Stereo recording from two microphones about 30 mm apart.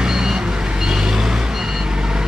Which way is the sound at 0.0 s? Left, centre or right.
Right.